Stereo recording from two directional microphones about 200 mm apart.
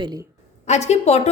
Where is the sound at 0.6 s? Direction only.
35° left (ahead or behind).